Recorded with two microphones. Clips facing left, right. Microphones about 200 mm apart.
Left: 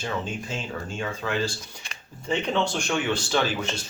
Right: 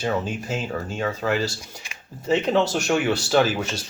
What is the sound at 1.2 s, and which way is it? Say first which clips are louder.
Speech: right 2 dB; 45° right (ahead or behind).